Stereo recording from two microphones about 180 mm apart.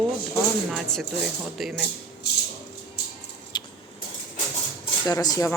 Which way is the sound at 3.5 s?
25° left (ahead or behind).